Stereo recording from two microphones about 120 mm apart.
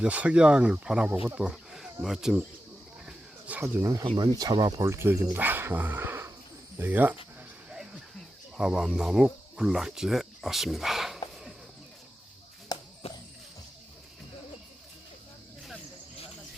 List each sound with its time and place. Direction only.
0.0 s speech: 10° right (ahead or behind)
1.1 s speech: 20° right (ahead or behind)
1.4 s speech: 5° right (ahead or behind)
3.1 s a sound: 10° right (ahead or behind)
3.8 s speech: 25° right (ahead or behind)
4.9 s speech: 20° right (ahead or behind)
8.5 s speech: 5° right (ahead or behind)
12.7 s a sound: 35° left (ahead or behind)